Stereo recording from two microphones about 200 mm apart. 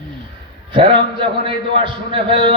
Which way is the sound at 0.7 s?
25° right (ahead or behind).